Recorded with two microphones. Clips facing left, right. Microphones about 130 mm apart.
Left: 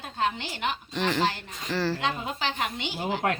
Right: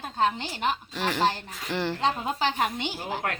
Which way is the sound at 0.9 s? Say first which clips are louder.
Left 2 dB; 10° right (ahead or behind).